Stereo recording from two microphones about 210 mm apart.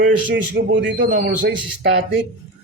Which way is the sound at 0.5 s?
60° right (ahead or behind).